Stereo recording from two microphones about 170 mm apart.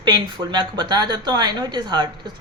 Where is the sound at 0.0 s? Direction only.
30° right (ahead or behind).